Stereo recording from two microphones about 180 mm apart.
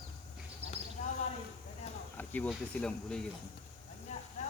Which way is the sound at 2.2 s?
10° left (ahead or behind).